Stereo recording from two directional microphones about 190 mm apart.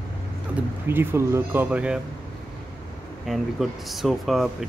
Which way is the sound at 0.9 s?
15° right (ahead or behind).